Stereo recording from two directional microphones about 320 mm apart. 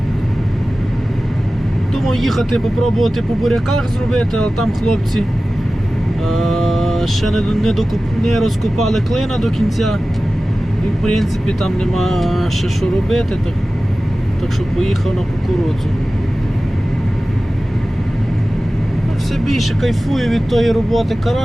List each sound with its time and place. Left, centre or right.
2.0 s speech: centre
6.2 s speech: centre
11.0 s speech: centre
19.5 s speech: centre